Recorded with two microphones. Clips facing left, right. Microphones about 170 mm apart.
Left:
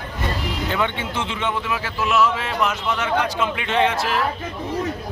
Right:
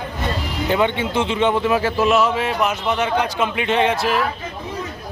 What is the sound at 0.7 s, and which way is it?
A man's voice, 20° right (ahead or behind).